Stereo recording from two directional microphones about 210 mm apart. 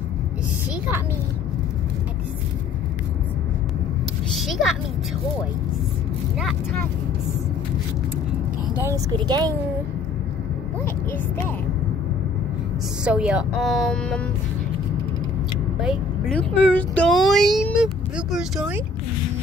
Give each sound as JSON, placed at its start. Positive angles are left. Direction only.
{"t": 4.3, "sound": "a sound", "side_deg": 0}
{"t": 8.8, "sound": "speech", "side_deg": -20}
{"t": 10.8, "sound": "speech", "side_deg": 10}
{"t": 13.0, "sound": "speech", "side_deg": -5}
{"t": 15.8, "sound": "speech", "side_deg": 0}